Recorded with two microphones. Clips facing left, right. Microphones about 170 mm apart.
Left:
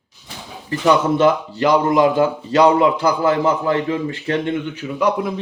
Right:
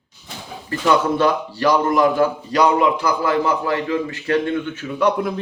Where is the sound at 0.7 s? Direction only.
20° left (ahead or behind).